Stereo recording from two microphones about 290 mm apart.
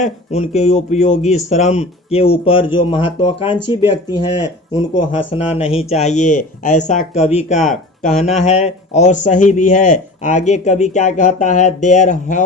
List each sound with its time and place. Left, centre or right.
0.0 s speech: left